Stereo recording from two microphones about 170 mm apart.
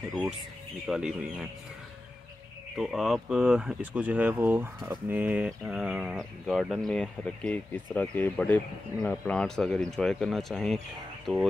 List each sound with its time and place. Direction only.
0.8 s speech: 5° right (ahead or behind)
2.8 s speech: centre (ahead or behind)